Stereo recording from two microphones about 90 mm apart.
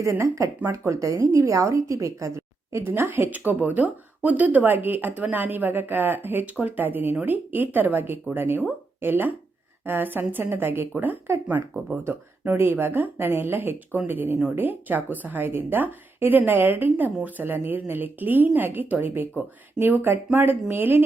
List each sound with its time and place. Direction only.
0.0 s a woman's voice: 35° right (ahead or behind)